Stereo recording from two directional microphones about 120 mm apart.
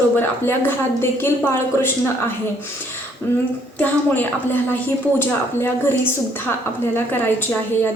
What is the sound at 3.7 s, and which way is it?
A woman's voice, 15° left (ahead or behind).